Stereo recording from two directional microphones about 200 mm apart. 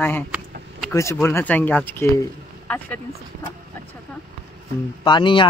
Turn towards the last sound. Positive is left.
turn(degrees=25)  # may be behind; listen again after turning